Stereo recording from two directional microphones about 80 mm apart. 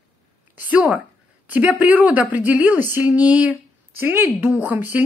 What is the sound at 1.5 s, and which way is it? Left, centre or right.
A woman's voice, right.